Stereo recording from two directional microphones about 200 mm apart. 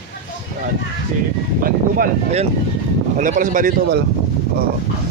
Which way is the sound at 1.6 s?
40° right (ahead or behind).